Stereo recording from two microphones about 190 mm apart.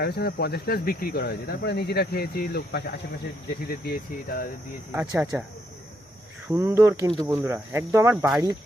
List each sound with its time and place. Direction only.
0.0 s speech: 60° left (ahead or behind)
4.9 s speech: 10° right (ahead or behind)
6.5 s speech: 15° right (ahead or behind)